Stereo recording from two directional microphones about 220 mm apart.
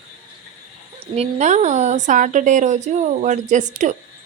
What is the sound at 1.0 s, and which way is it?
Speech, 30° right (ahead or behind).